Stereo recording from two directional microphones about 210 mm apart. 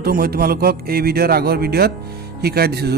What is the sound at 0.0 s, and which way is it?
Speech, 45° right (ahead or behind).